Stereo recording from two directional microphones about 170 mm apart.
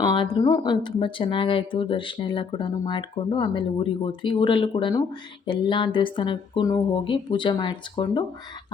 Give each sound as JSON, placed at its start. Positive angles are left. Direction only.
{"t": 0.0, "sound": "speech", "side_deg": 25}